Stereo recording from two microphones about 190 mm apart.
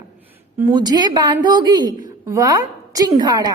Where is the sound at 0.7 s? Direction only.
20° right (ahead or behind).